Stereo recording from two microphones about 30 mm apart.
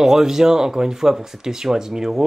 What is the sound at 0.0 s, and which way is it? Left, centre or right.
Speech, centre.